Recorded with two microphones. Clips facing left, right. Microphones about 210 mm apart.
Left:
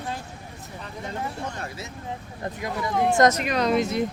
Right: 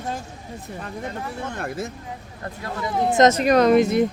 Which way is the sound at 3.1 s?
20° right (ahead or behind).